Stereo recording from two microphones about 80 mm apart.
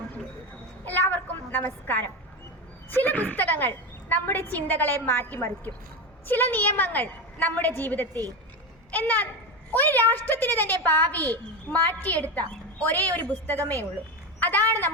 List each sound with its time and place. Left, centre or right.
0.9 s a woman's voice: left